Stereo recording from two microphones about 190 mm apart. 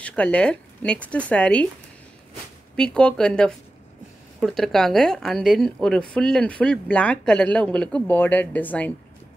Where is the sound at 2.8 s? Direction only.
5° left (ahead or behind).